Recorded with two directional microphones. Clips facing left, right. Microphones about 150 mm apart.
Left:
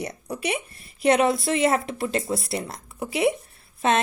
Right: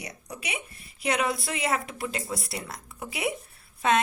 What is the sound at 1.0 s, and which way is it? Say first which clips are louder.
Speech: left 8 dB; 30° left (ahead or behind).